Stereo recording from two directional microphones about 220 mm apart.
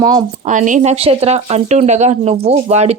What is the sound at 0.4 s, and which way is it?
A woman's voice, 35° right (ahead or behind).